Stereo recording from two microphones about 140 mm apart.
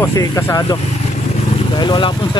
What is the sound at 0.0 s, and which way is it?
Speech, 25° left (ahead or behind).